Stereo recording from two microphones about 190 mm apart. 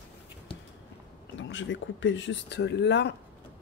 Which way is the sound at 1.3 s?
75° left (ahead or behind).